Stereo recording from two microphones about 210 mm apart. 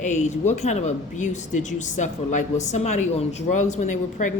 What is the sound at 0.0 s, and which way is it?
Speech, 35° left (ahead or behind).